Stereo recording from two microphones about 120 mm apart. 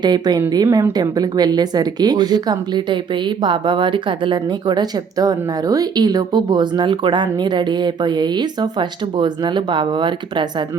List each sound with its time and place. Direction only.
0.0 s a woman's voice: 35° right (ahead or behind)